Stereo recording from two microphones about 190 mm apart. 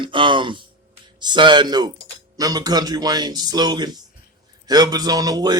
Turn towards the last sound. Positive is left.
turn(degrees=-20)  # may be behind; listen again after turning